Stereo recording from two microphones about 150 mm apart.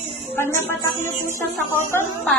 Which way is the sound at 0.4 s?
15° left (ahead or behind).